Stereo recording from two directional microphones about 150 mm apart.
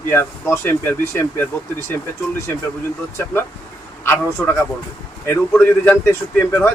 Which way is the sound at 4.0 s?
15° left (ahead or behind).